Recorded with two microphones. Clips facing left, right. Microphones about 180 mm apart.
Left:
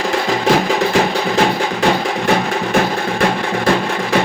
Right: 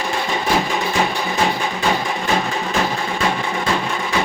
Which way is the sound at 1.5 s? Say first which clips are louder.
Left 4 dB; 70° left (ahead or behind).